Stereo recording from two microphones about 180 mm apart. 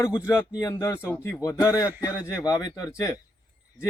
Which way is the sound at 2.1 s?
5° right (ahead or behind).